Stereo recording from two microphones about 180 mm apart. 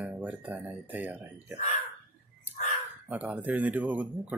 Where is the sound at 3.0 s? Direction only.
10° right (ahead or behind).